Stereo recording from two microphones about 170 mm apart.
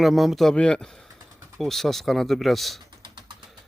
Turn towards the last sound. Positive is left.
turn(degrees=-25)  # may be behind; listen again after turning